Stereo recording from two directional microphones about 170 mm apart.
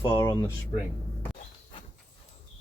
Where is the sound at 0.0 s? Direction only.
15° left (ahead or behind).